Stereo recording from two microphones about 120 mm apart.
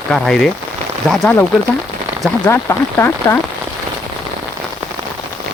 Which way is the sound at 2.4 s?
20° left (ahead or behind).